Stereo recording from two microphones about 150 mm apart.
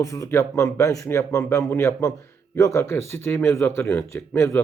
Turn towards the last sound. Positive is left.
turn(degrees=15)  # may be behind; listen again after turning